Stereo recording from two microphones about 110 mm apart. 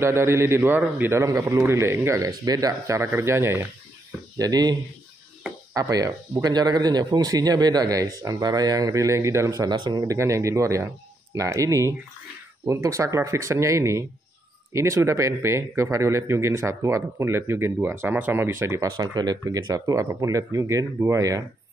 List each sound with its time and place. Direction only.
0.0 s speech: 25° right (ahead or behind)
4.4 s speech: 35° right (ahead or behind)
5.8 s speech: 30° right (ahead or behind)
9.7 s speech: 40° right (ahead or behind)
10.0 s speech: 25° right (ahead or behind)
18.9 s speech: 40° right (ahead or behind)